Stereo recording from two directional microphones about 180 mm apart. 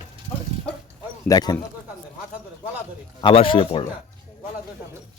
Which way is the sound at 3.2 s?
25° left (ahead or behind).